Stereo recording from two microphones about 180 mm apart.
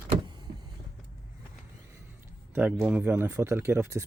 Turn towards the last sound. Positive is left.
turn(degrees=-15)  # may be behind; listen again after turning